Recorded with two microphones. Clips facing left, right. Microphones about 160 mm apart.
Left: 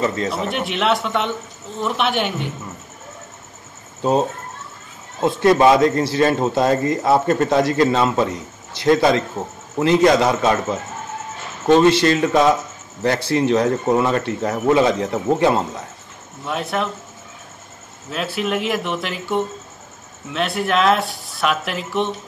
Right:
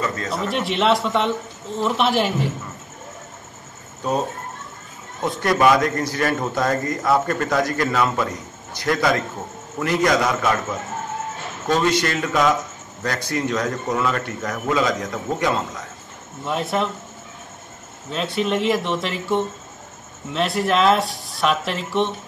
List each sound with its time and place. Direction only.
0.0 s a man's voice: 25° left (ahead or behind)
0.5 s speech: centre (ahead or behind)
5.2 s a man's voice: 25° left (ahead or behind)
16.4 s speech: centre (ahead or behind)
18.1 s speech: 5° left (ahead or behind)